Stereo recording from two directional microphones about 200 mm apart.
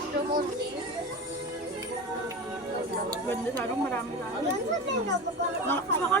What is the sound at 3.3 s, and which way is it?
Speech, 10° left (ahead or behind).